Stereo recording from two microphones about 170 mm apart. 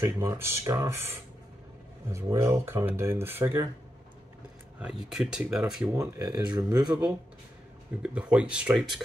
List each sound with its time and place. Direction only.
0.0 s speech: 15° right (ahead or behind)
4.7 s speech: 5° right (ahead or behind)
5.9 s speech: 15° right (ahead or behind)
8.0 s speech: 5° right (ahead or behind)